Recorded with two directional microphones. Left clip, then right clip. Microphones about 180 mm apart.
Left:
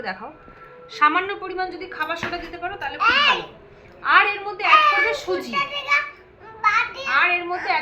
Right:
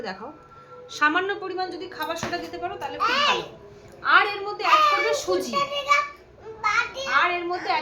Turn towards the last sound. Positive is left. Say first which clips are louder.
# left 3 dB
turn(degrees=-10)  # may be behind; listen again after turning